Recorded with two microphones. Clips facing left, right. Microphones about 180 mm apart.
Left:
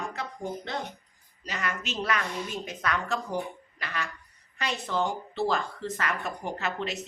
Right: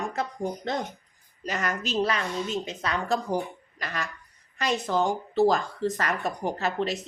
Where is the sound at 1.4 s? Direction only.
45° right (ahead or behind).